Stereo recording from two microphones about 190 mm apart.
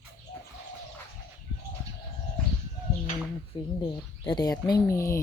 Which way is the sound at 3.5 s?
25° left (ahead or behind).